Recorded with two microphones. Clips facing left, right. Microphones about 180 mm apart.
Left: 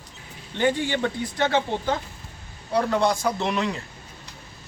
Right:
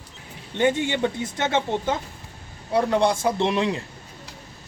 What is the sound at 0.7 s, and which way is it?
Speech, 20° right (ahead or behind).